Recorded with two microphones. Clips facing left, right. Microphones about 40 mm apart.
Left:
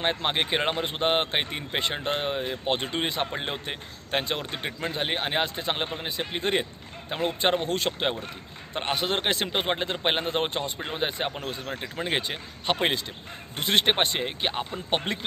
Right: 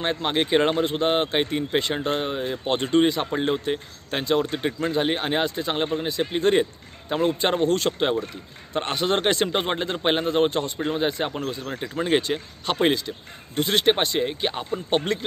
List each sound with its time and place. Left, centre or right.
0.0 s speech: left
0.8 s speech: left; by 9.8 s centre
10.2 s speech: left
11.9 s speech: centre
12.2 s speech: centre
14.2 s speech: centre